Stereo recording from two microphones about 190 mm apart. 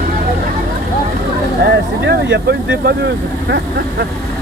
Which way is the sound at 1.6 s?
60° right (ahead or behind).